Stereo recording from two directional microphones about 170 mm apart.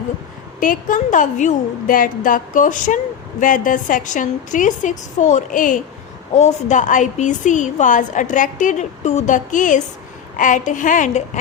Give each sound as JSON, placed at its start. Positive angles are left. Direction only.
{"t": 0.6, "sound": "a woman's voice", "side_deg": 50}